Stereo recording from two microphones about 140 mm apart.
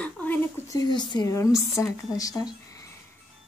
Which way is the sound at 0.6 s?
25° left (ahead or behind).